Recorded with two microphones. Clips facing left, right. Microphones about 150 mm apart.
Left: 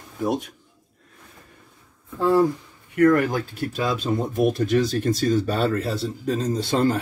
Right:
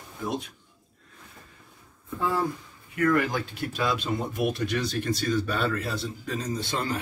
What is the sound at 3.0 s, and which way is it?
Speech, 45° left (ahead or behind).